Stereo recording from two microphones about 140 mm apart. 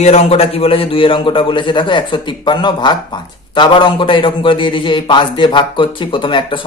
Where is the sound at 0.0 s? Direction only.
50° left (ahead or behind).